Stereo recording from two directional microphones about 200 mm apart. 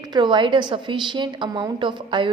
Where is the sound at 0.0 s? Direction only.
20° right (ahead or behind).